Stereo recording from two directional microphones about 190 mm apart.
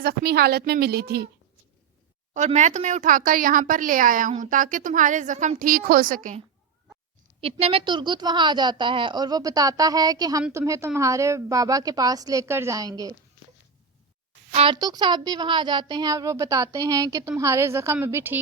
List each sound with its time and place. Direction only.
0.0 s a woman's voice: 55° right (ahead or behind)
2.3 s speech: 40° right (ahead or behind)
7.4 s a woman's voice: 30° right (ahead or behind)
14.5 s a woman's voice: 30° right (ahead or behind); by 18.3 s 10° right (ahead or behind)